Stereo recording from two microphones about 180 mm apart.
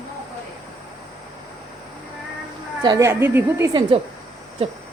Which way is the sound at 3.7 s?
25° right (ahead or behind).